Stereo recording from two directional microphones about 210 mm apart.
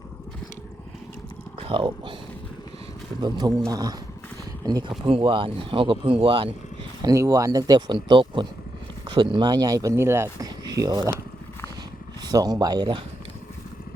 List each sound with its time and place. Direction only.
1.5 s a sound: 25° right (ahead or behind)
3.2 s speech: 20° right (ahead or behind)
12.2 s speech: 15° right (ahead or behind)